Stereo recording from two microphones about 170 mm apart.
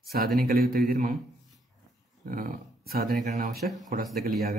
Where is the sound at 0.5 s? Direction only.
65° right (ahead or behind).